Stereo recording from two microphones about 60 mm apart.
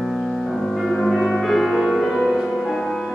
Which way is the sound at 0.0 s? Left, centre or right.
Centre.